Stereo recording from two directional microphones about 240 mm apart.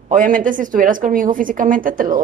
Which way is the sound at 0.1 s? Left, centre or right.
Right.